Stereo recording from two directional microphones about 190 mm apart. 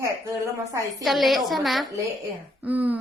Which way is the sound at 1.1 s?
Centre (ahead or behind).